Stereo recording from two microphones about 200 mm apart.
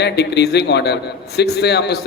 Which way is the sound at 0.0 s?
55° left (ahead or behind).